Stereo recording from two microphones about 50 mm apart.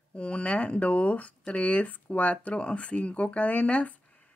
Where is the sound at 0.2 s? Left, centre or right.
Left.